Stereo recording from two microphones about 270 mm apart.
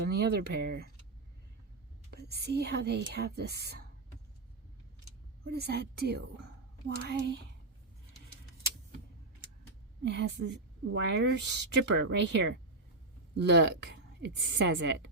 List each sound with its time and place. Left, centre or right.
0.1 s speech: right
2.0 s speech: right
5.5 s speech: right
10.0 s speech: right